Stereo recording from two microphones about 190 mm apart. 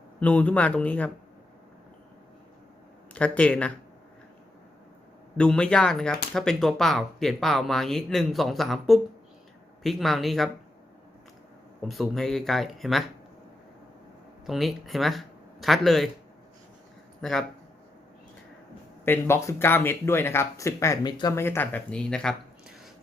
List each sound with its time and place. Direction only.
0.2 s speech: 5° left (ahead or behind)
3.1 s speech: 5° left (ahead or behind)
5.4 s speech: 5° left (ahead or behind)
11.8 s speech: centre (ahead or behind)
14.4 s speech: centre (ahead or behind)
17.2 s speech: centre (ahead or behind)
19.0 s speech: 10° left (ahead or behind)